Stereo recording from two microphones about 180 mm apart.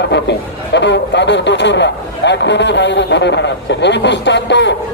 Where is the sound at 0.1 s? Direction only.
75° left (ahead or behind).